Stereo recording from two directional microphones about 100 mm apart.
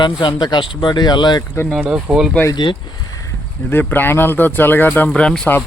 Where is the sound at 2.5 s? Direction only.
55° left (ahead or behind).